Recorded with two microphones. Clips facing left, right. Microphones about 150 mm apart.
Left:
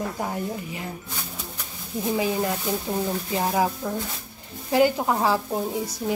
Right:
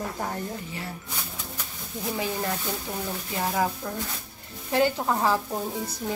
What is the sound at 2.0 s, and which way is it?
Speech, 20° left (ahead or behind).